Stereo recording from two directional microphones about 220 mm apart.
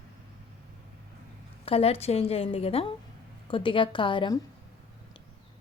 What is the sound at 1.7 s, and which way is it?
Speech, 25° left (ahead or behind).